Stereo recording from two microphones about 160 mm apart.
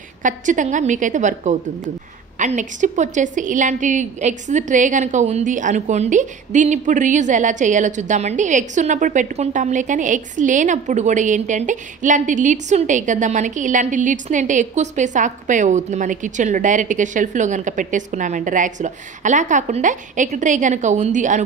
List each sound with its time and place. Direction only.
0.2 s a woman's voice: 50° right (ahead or behind)